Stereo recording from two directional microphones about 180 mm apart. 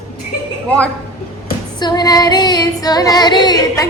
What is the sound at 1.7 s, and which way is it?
Female singing, 25° left (ahead or behind).